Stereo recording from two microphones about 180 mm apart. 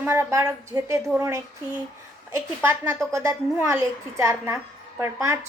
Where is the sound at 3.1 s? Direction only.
15° right (ahead or behind).